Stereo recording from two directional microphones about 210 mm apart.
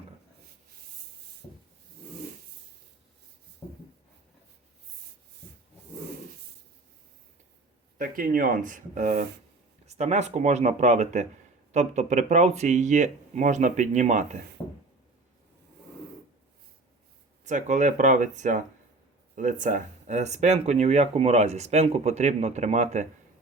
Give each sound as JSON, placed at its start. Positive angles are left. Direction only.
{"t": 7.9, "sound": "speech", "side_deg": -45}
{"t": 14.6, "sound": "a sound", "side_deg": 15}
{"t": 17.4, "sound": "speech", "side_deg": -35}